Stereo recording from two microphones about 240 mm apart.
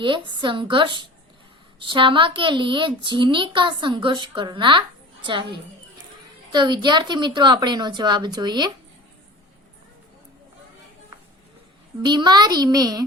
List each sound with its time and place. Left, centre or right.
0.0 s a woman's voice: centre
12.0 s a child's voice: centre